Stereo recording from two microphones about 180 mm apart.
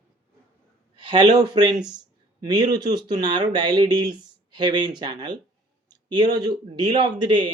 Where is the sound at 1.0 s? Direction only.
25° right (ahead or behind).